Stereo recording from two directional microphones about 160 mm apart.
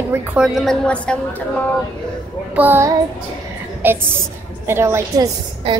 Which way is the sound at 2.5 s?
15° right (ahead or behind).